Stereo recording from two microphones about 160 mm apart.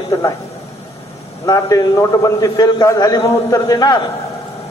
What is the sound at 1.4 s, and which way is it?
A man's voice, 20° left (ahead or behind).